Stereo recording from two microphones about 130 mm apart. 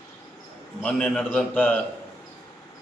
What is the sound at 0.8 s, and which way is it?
A man's voice, 5° left (ahead or behind).